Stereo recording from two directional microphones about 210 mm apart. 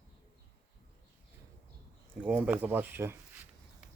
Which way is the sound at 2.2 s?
5° right (ahead or behind).